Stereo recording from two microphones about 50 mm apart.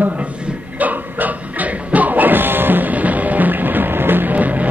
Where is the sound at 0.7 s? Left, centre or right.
Right.